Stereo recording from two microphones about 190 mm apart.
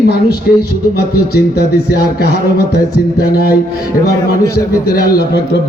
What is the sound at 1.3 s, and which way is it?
A man's voice, 55° left (ahead or behind).